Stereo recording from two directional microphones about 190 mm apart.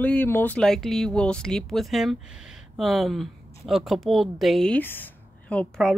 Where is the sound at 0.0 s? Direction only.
10° left (ahead or behind).